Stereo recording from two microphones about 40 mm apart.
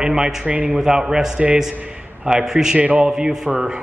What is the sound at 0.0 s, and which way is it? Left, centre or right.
A man's voice, centre.